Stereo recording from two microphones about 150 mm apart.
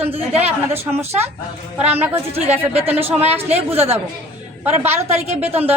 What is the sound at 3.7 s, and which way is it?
A woman's voice, 15° right (ahead or behind).